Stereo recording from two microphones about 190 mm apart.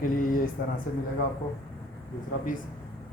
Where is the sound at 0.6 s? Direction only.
55° left (ahead or behind).